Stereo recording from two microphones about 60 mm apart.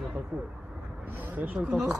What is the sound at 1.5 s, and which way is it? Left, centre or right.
Speech, centre.